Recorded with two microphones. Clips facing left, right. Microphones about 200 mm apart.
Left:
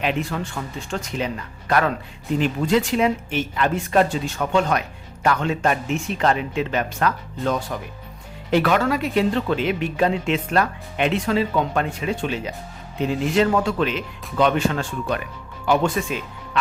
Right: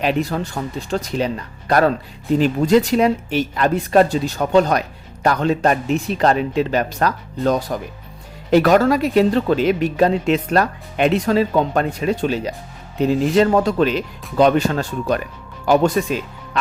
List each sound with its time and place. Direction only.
0.0 s speech: 35° right (ahead or behind)